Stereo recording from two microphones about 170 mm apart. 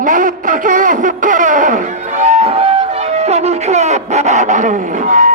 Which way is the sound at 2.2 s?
35° right (ahead or behind).